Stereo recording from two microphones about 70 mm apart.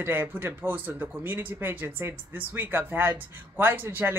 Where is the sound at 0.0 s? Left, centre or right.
Right.